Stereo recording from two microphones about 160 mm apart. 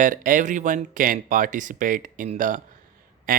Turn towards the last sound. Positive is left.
turn(degrees=-65)  # may be behind; listen again after turning